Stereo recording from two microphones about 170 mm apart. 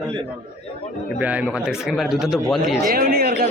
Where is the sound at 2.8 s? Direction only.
60° right (ahead or behind).